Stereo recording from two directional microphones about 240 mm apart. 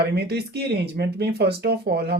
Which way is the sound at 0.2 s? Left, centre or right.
Right.